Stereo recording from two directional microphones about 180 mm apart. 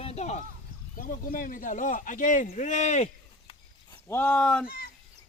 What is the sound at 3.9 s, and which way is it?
Speech, 15° left (ahead or behind).